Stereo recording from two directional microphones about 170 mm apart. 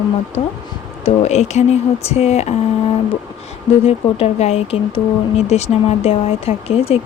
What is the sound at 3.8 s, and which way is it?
Speech, 35° left (ahead or behind).